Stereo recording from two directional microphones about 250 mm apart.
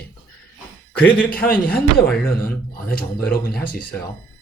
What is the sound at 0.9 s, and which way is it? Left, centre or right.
Speech, centre.